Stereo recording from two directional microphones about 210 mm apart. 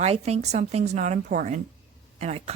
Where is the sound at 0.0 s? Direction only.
30° right (ahead or behind).